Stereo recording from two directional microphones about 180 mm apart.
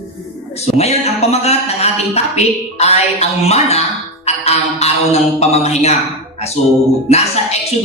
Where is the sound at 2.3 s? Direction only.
35° left (ahead or behind).